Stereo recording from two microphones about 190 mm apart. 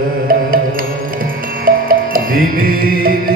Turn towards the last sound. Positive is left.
turn(degrees=-50)  # may be behind; listen again after turning